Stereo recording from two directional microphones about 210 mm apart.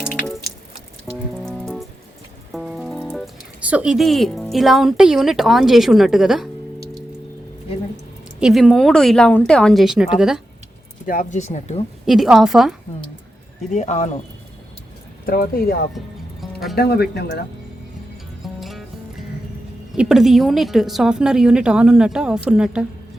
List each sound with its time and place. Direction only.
1.3 s music: centre (ahead or behind)
2.5 s speech: centre (ahead or behind)
8.4 s a woman's voice: centre (ahead or behind)
11.0 s speech: 40° left (ahead or behind)
12.0 s a woman's voice: centre (ahead or behind)
13.7 s speech: 35° left (ahead or behind)
15.3 s speech: 45° left (ahead or behind)
16.4 s music: centre (ahead or behind)
16.7 s speech: 50° left (ahead or behind)
18.4 s music: centre (ahead or behind)
19.9 s a woman's voice: centre (ahead or behind)